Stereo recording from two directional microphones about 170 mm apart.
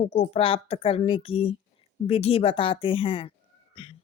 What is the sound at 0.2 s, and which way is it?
Speech, 35° left (ahead or behind).